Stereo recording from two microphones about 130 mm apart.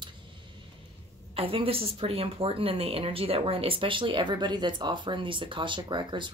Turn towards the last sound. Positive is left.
turn(degrees=-35)  # may be behind; listen again after turning